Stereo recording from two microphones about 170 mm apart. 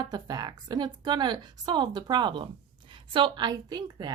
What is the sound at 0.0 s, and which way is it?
A woman's voice, 25° right (ahead or behind).